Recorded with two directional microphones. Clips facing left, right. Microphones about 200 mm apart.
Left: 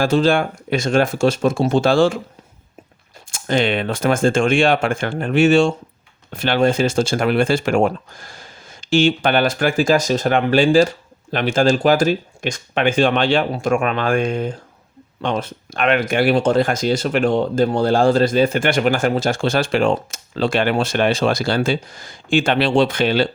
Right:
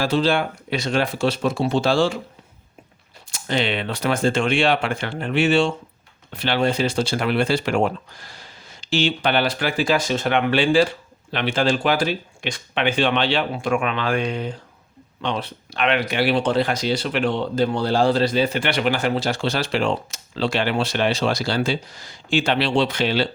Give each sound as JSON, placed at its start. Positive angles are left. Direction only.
{"t": 0.0, "sound": "speech", "side_deg": 50}
{"t": 3.3, "sound": "speech", "side_deg": 50}